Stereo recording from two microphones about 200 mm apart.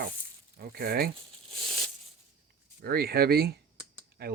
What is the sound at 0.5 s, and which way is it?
Speech, 50° right (ahead or behind).